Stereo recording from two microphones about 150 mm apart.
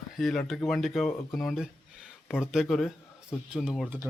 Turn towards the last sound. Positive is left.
turn(degrees=0)  # may be behind; listen again after turning